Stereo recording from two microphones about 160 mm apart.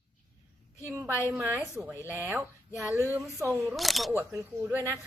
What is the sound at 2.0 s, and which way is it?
Speech, 10° right (ahead or behind).